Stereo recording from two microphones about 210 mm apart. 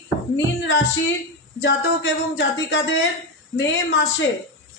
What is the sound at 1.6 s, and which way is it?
Speech, 60° left (ahead or behind).